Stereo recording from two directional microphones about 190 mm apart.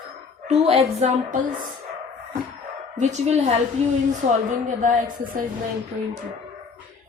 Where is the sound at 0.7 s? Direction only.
35° right (ahead or behind).